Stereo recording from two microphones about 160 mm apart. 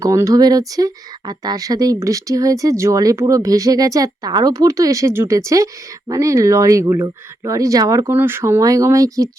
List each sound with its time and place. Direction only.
0.0 s speech: 20° right (ahead or behind)